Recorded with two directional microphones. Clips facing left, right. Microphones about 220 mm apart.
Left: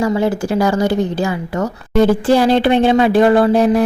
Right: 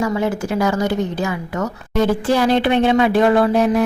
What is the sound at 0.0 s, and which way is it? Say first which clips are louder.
Speech: left 4 dB; 30° left (ahead or behind).